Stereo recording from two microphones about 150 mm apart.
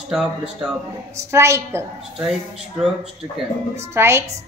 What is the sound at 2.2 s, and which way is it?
Speech, 5° right (ahead or behind).